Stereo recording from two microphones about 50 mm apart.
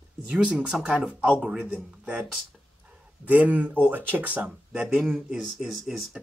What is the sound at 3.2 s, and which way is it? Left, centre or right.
Speech, right.